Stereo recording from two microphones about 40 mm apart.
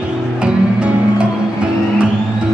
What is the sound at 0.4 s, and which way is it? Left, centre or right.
Music, right.